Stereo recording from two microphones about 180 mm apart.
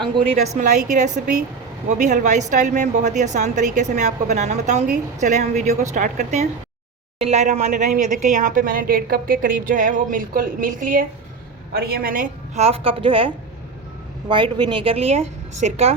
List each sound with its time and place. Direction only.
0.0 s a woman's voice: 40° right (ahead or behind)